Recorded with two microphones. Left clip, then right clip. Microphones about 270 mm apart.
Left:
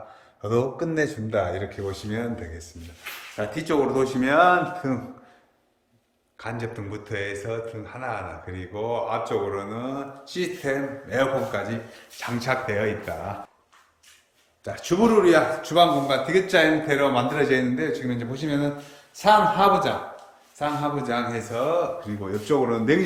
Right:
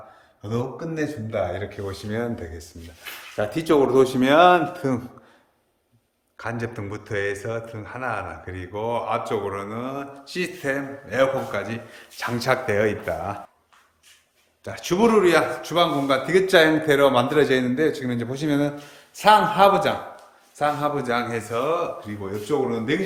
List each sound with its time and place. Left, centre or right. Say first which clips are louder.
0.4 s a man's voice: left 4 dB; centre; by 4.9 s right
6.3 s a man's voice: right 2 dB; centre
12.2 s a man's voice: right 3 dB; centre
14.6 s a man's voice: right 2 dB; centre
22.5 s speech: left 1 dB; centre